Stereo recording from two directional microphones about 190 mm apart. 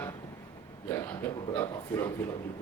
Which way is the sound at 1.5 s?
15° left (ahead or behind).